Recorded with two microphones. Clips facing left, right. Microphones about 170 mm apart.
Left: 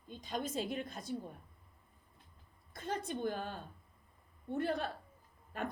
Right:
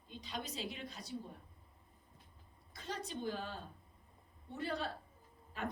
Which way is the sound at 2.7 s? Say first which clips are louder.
Left 5 dB; 55° left (ahead or behind).